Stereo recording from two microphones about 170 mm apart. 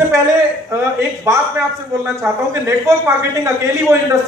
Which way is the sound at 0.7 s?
15° right (ahead or behind).